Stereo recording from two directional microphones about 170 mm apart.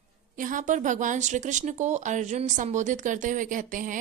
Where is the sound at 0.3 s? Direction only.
50° right (ahead or behind).